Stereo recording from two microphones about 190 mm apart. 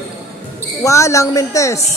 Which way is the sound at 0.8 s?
15° left (ahead or behind).